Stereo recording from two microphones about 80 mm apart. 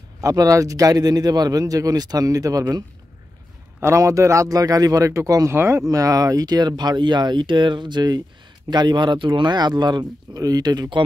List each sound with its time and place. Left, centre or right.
0.2 s a man's voice: right
3.8 s a man's voice: right
5.5 s speech: right
5.9 s speech: right